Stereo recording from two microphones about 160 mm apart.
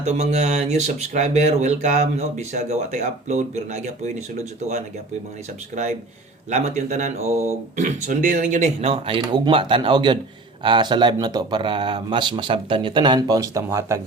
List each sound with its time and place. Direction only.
0.0 s speech: 45° right (ahead or behind)
6.5 s speech: 45° right (ahead or behind); by 14.0 s 15° right (ahead or behind)